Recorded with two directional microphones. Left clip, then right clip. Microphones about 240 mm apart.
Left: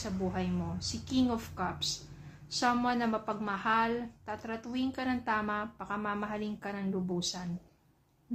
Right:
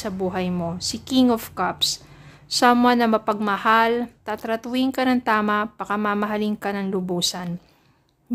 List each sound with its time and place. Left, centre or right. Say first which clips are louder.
0.0 s a woman's voice: right 11 dB; right